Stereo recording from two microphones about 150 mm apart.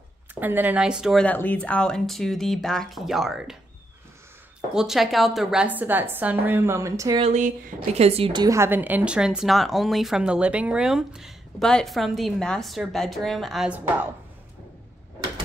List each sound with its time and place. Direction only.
0.3 s a woman's voice: 10° right (ahead or behind)
1.2 s speech: 10° left (ahead or behind)
4.7 s a woman's voice: centre (ahead or behind); by 7.2 s 20° right (ahead or behind)
7.2 s a woman's voice: 50° right (ahead or behind); by 8.5 s 30° right (ahead or behind)
8.5 s speech: 15° right (ahead or behind)
13.7 s a woman's voice: 10° right (ahead or behind)